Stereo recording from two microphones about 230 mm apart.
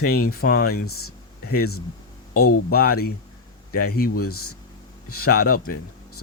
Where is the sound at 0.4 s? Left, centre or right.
Left.